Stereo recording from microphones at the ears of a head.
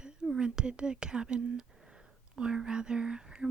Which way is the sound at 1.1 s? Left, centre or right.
Right.